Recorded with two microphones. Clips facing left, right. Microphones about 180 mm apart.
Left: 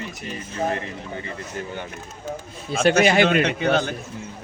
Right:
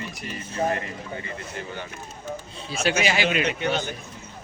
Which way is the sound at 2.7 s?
55° left (ahead or behind).